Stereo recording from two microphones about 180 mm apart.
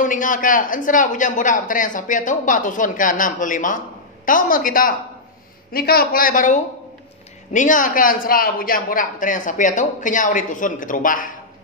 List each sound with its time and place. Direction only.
0.0 s a man's voice: 45° left (ahead or behind)